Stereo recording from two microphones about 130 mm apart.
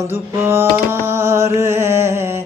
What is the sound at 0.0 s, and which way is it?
Mantra, 20° right (ahead or behind).